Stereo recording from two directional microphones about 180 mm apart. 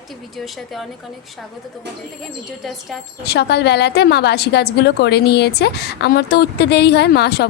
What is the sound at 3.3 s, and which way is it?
A woman's voice, 65° left (ahead or behind).